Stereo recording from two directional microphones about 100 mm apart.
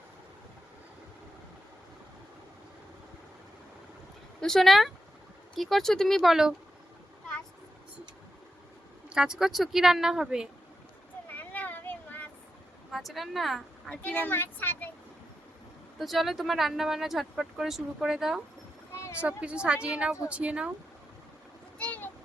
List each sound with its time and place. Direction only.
4.4 s speech: 5° left (ahead or behind)
9.0 s speech: 10° right (ahead or behind)
11.3 s a sound: 20° left (ahead or behind)
12.9 s speech: centre (ahead or behind)
13.9 s speech: 15° left (ahead or behind)
16.0 s a woman's voice: centre (ahead or behind)
21.8 s vehicle: 15° left (ahead or behind)